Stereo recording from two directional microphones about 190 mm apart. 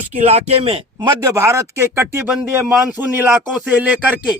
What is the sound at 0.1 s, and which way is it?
A man's voice, 35° right (ahead or behind).